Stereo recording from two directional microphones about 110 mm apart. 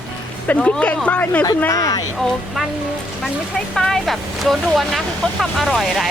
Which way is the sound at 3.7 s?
Centre (ahead or behind).